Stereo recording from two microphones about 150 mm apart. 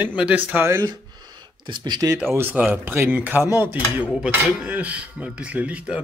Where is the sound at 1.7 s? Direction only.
30° right (ahead or behind).